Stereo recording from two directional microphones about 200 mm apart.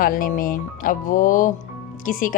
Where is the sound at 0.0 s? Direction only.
45° left (ahead or behind).